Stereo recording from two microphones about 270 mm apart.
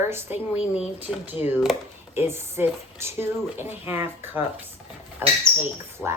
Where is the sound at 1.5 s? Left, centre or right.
Centre.